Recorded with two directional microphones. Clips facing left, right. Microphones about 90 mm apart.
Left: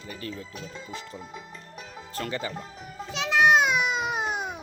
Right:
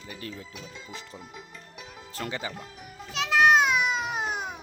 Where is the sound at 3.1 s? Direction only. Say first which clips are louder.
Even; centre (ahead or behind).